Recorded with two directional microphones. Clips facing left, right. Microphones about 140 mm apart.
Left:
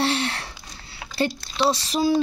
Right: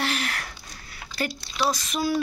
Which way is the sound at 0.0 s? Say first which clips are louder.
Left 5 dB; 30° left (ahead or behind).